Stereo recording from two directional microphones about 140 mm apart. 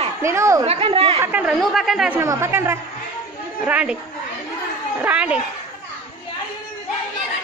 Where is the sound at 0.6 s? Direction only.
45° right (ahead or behind).